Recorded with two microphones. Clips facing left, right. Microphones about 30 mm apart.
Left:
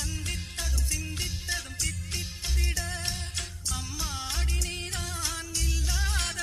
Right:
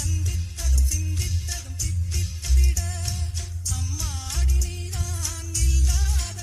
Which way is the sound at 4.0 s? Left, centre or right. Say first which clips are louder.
Left 1 dB; centre.